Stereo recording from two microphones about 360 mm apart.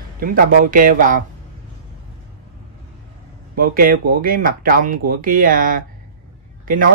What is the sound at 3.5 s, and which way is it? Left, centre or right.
Speech, right.